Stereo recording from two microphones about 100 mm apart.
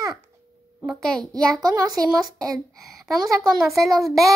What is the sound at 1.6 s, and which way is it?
Child singing, 40° right (ahead or behind).